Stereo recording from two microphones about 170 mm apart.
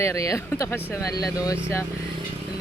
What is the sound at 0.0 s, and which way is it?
Speech, 15° left (ahead or behind).